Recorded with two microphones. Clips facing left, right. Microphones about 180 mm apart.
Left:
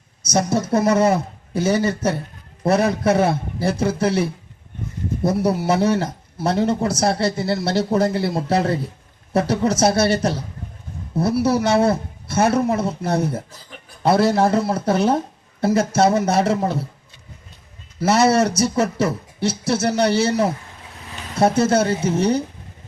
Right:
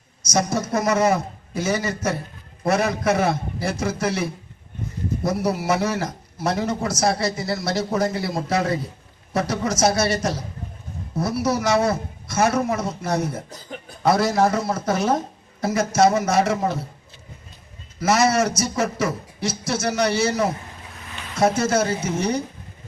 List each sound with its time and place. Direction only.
0.3 s a man's voice: 30° left (ahead or behind)
18.0 s a man's voice: 30° left (ahead or behind)
21.6 s a man's voice: 30° left (ahead or behind)